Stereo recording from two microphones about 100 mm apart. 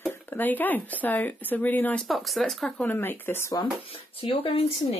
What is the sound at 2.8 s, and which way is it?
Speech, 20° left (ahead or behind).